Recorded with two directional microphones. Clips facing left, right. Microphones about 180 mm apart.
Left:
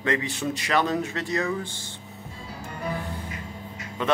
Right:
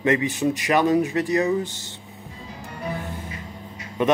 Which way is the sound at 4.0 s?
20° right (ahead or behind).